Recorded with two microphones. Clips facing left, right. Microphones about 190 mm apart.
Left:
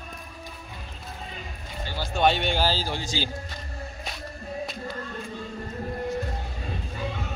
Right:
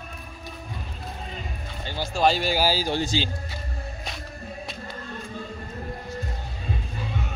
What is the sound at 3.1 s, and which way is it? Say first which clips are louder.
Speech: right 4 dB; 25° right (ahead or behind).